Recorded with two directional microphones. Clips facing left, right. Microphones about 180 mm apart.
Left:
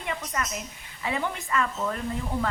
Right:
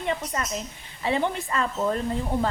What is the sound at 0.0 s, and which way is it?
Speech, 30° right (ahead or behind).